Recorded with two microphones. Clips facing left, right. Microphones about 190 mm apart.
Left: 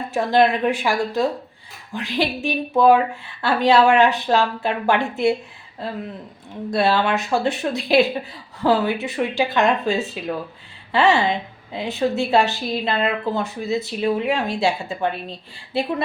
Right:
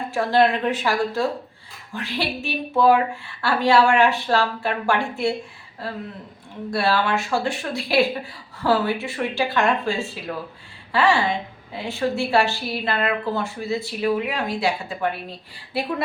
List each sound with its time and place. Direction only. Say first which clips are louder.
0.1 s a woman's voice: left 2 dB; 20° left (ahead or behind)